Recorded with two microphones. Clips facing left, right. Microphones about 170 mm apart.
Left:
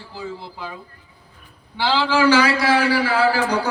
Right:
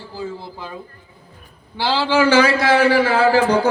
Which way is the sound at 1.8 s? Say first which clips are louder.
Right 1 dB; 20° right (ahead or behind).